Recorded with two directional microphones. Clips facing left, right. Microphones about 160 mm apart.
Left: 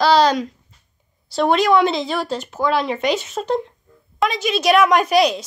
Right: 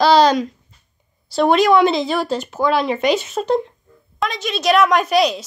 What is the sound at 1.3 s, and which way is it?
A woman's voice, 10° right (ahead or behind).